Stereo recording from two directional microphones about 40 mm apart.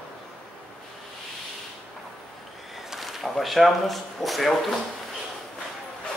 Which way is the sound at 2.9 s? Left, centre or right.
Centre.